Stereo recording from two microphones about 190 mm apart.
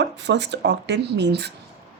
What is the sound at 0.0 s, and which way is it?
A woman's voice, 65° right (ahead or behind).